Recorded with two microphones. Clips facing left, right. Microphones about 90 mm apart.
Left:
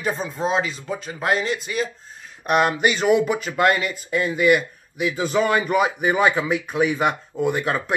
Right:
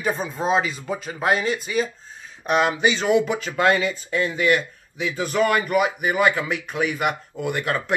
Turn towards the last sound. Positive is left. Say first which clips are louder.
# left 3 dB
turn(degrees=15)  # may be behind; listen again after turning